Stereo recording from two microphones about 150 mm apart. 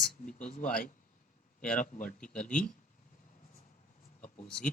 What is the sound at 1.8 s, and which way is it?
Speech, 60° left (ahead or behind).